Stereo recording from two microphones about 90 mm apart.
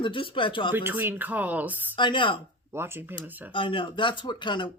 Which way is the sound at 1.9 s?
65° left (ahead or behind).